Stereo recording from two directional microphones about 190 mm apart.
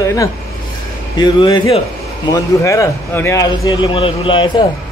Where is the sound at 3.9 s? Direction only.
30° left (ahead or behind).